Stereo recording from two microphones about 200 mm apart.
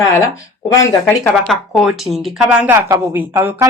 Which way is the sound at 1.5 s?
Centre (ahead or behind).